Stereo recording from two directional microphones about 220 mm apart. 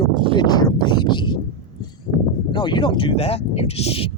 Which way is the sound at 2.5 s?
20° left (ahead or behind).